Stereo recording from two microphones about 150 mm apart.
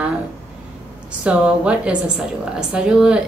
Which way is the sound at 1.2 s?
5° right (ahead or behind).